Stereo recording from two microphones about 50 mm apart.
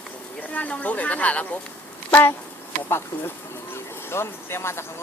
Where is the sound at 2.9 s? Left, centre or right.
Left.